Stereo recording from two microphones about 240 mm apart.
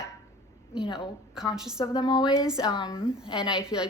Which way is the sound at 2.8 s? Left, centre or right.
Centre.